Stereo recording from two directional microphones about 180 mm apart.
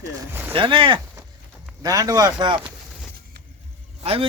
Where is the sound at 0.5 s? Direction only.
30° right (ahead or behind).